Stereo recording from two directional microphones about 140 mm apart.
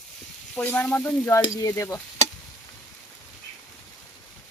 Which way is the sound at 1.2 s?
25° left (ahead or behind).